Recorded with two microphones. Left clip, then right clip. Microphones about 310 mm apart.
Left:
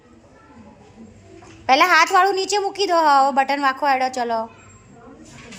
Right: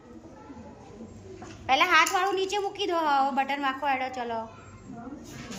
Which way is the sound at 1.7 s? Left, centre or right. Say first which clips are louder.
Left 8 dB; centre.